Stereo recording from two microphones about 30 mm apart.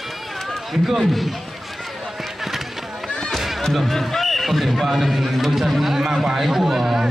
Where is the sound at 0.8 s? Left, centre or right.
Centre.